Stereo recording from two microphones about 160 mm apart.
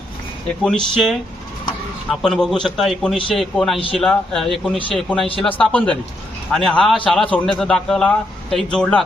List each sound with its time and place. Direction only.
0.4 s a man's voice: 5° left (ahead or behind)